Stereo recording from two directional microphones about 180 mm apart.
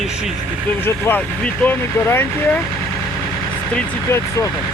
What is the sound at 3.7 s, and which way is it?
Speech, 15° left (ahead or behind).